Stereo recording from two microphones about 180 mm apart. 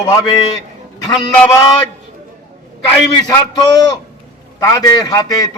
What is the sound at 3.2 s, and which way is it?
A man's voice, 20° left (ahead or behind).